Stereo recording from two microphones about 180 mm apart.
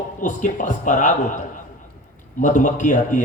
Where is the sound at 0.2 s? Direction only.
45° left (ahead or behind).